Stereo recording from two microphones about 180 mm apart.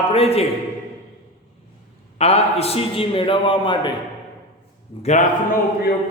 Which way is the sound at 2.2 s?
35° left (ahead or behind).